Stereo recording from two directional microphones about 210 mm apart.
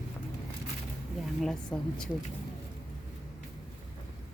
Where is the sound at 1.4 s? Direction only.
5° left (ahead or behind).